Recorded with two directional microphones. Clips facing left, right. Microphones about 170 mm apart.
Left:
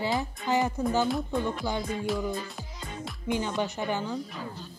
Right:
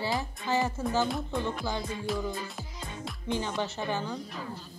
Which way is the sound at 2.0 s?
Centre (ahead or behind).